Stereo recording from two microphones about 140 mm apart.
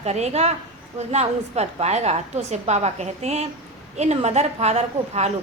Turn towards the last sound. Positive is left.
turn(degrees=-50)  # may be behind; listen again after turning